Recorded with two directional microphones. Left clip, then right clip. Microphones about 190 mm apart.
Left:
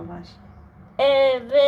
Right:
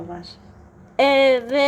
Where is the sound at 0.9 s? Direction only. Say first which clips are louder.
Right 2 dB; 45° right (ahead or behind).